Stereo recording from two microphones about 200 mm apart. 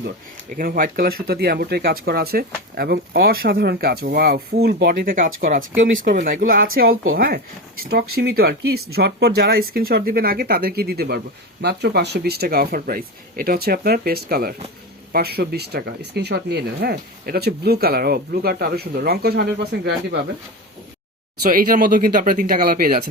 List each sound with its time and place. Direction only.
0.5 s speech: 45° right (ahead or behind)
21.4 s speech: 45° right (ahead or behind)